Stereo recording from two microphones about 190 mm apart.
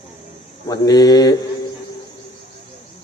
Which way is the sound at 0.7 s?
20° left (ahead or behind).